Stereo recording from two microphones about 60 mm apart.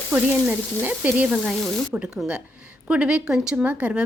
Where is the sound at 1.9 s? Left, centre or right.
Centre.